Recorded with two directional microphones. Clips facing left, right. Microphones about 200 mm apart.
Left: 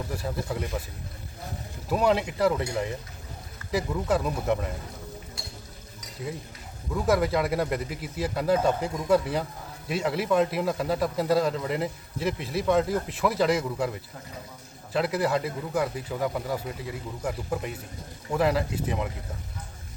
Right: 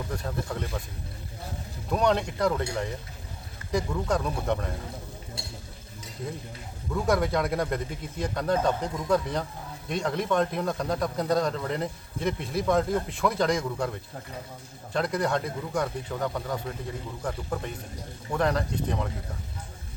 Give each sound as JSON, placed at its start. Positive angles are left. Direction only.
{"t": 0.1, "sound": "speech", "side_deg": 5}
{"t": 1.9, "sound": "speech", "side_deg": 5}
{"t": 6.9, "sound": "speech", "side_deg": 0}